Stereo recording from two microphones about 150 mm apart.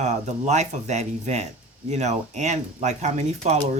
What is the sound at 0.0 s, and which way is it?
A woman's voice, 50° right (ahead or behind).